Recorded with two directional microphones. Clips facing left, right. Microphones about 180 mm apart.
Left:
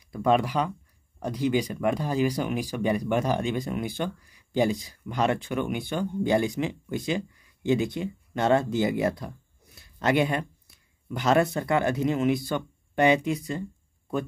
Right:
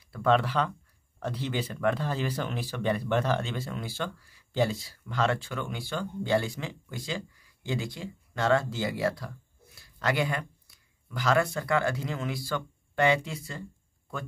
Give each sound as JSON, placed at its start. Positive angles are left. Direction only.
{"t": 0.1, "sound": "speech", "side_deg": 15}